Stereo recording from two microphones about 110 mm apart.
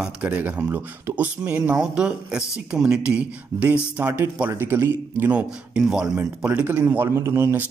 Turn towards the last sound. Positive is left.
turn(degrees=-20)  # may be behind; listen again after turning